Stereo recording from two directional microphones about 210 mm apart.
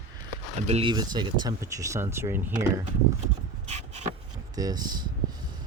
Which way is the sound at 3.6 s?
30° right (ahead or behind).